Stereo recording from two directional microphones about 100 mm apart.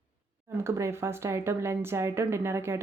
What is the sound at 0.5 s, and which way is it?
Speech, 25° right (ahead or behind).